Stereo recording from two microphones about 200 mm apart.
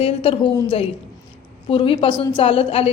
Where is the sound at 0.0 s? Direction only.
30° left (ahead or behind).